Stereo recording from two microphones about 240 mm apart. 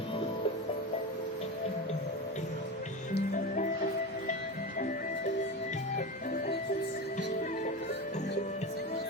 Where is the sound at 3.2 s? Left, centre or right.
Left.